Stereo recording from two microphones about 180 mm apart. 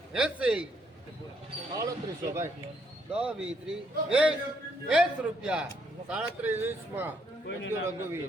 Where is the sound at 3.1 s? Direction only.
5° right (ahead or behind).